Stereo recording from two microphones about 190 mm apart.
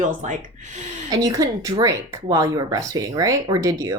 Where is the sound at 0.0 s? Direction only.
40° right (ahead or behind).